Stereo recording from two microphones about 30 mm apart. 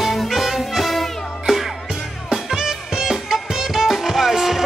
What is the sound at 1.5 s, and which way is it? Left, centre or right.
Music, centre.